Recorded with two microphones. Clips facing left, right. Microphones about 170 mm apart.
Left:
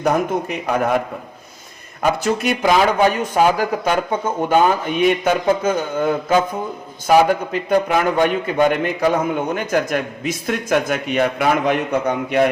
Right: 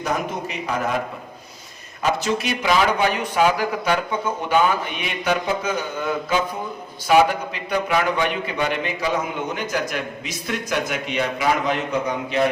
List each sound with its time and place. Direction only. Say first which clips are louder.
0.0 s a man's voice: left 7 dB; 55° left (ahead or behind)
2.0 s a man's voice: left 3 dB; 50° left (ahead or behind)